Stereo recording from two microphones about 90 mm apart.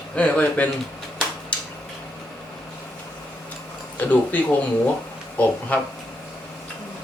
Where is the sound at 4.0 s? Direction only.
20° left (ahead or behind).